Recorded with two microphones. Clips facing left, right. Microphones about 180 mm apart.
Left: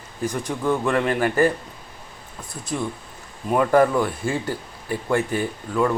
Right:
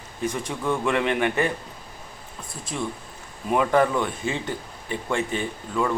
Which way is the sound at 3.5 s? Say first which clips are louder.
Left 3 dB; 5° left (ahead or behind).